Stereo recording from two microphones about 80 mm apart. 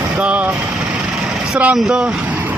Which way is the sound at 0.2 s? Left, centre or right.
Centre.